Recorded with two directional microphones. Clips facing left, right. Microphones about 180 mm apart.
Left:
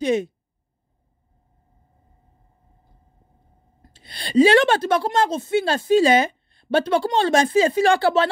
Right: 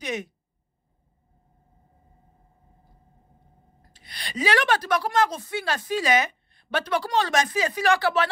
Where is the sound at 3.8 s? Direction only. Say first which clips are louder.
Left 5 dB; 25° left (ahead or behind).